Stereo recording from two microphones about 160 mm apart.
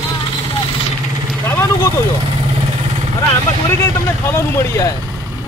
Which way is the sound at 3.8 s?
15° left (ahead or behind).